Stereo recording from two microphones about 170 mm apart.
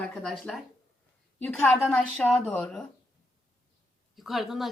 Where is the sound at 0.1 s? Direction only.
5° left (ahead or behind).